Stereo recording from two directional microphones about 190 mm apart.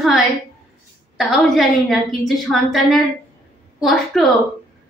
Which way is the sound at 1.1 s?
Centre (ahead or behind).